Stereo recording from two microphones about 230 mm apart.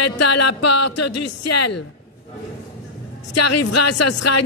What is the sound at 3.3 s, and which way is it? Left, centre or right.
Speech, left.